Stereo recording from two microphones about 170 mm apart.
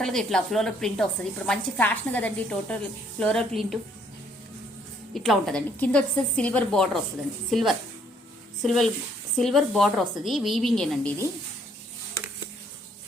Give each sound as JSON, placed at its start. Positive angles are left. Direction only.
{"t": 0.0, "sound": "a woman's voice", "side_deg": 0}
{"t": 5.1, "sound": "a woman's voice", "side_deg": 0}